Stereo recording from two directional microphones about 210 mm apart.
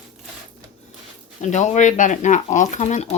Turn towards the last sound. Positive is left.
turn(degrees=35)  # may be behind; listen again after turning